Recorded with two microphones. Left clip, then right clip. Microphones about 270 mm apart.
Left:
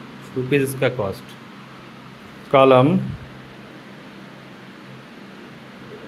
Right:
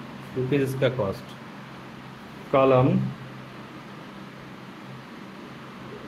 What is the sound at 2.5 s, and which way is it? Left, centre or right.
Speech, left.